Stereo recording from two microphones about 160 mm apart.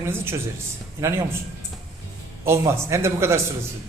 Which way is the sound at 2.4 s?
15° right (ahead or behind).